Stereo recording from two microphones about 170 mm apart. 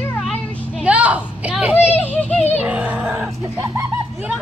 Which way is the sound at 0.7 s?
5° right (ahead or behind).